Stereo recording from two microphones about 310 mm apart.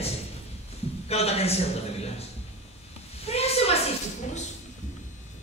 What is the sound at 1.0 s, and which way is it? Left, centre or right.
Speech, centre.